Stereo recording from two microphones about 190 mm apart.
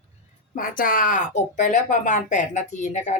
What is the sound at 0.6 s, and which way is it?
Speech, 45° left (ahead or behind).